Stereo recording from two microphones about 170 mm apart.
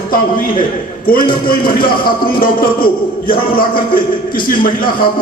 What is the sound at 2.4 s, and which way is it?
A man's voice, 60° left (ahead or behind).